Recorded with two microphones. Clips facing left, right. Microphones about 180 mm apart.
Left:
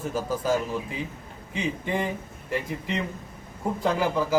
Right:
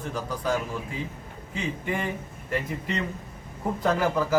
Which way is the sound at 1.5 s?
20° left (ahead or behind).